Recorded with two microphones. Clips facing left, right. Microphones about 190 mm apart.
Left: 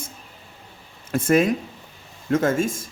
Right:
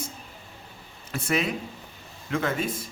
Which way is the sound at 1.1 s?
50° left (ahead or behind).